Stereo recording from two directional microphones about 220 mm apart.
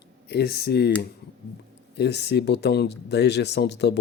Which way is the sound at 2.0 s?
50° left (ahead or behind).